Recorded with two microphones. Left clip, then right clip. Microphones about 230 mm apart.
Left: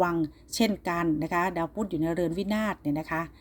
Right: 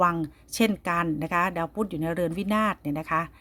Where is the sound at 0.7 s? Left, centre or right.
Right.